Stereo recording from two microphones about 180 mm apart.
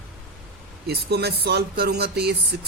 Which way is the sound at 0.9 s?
65° right (ahead or behind).